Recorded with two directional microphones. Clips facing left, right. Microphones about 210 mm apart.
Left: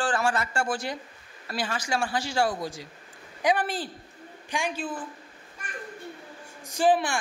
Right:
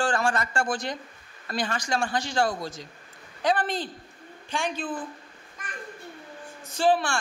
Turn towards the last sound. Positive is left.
turn(degrees=15)  # may be behind; listen again after turning